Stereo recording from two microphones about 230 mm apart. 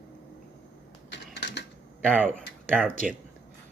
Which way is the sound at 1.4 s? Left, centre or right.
Left.